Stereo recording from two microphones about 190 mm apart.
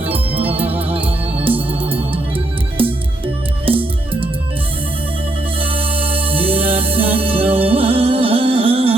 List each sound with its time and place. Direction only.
0.0 s organ: 30° right (ahead or behind)
3.7 s music: 30° right (ahead or behind)
5.5 s music: 30° right (ahead or behind)